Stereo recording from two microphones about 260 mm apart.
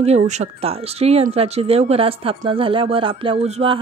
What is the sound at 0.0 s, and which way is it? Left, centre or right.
Speech, right.